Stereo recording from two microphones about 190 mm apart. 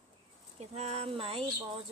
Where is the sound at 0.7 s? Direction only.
35° right (ahead or behind).